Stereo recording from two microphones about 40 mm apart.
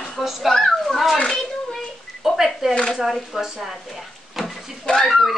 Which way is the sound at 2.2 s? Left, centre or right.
Centre.